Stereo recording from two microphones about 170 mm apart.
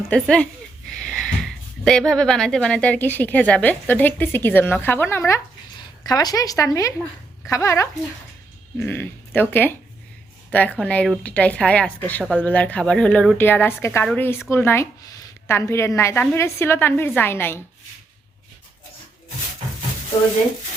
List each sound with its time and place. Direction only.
0.1 s speech: 5° left (ahead or behind)